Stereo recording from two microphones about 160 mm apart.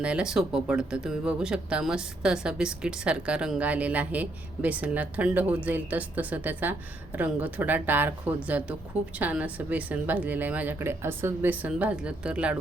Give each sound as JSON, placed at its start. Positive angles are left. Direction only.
{"t": 0.0, "sound": "speech", "side_deg": -5}